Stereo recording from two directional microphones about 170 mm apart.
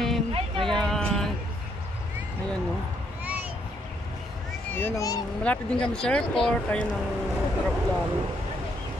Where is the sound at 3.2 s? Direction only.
10° right (ahead or behind).